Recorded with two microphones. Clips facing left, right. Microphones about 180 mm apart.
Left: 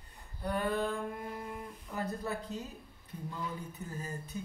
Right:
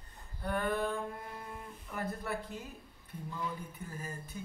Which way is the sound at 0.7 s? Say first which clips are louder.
Left 1 dB; 20° left (ahead or behind).